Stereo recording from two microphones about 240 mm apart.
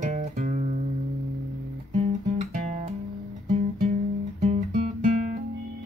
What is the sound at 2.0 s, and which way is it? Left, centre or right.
Music, right.